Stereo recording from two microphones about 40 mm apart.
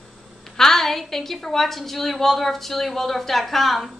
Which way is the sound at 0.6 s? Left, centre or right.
Centre.